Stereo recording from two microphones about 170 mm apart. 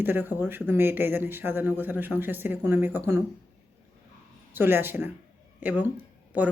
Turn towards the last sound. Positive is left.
turn(degrees=-10)  # may be behind; listen again after turning